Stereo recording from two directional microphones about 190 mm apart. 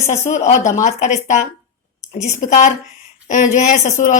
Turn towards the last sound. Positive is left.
turn(degrees=40)  # may be behind; listen again after turning